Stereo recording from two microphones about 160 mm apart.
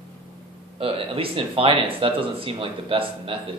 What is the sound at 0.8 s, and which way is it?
Speech, 35° right (ahead or behind).